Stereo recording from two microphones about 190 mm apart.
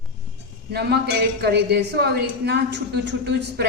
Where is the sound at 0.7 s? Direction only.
60° right (ahead or behind).